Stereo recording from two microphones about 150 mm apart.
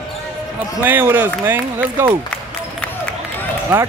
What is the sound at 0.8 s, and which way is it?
Speech, 10° right (ahead or behind).